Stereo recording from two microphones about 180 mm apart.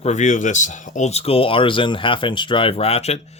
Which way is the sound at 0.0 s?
40° left (ahead or behind).